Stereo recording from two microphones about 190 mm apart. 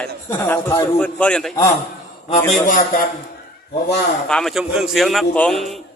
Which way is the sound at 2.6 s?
45° left (ahead or behind).